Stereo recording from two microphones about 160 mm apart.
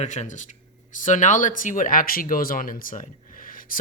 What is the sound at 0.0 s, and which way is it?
Speech, 50° left (ahead or behind).